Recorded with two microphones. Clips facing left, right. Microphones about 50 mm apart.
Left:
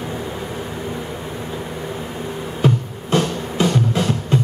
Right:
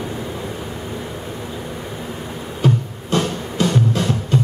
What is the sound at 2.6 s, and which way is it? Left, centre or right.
Music, left.